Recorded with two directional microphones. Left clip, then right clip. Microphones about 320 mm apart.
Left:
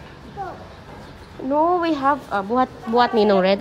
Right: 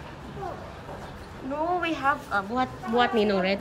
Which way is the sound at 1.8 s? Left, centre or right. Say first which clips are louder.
Left 6 dB; centre.